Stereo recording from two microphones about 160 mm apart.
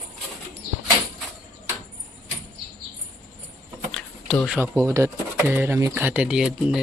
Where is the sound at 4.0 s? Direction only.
5° left (ahead or behind).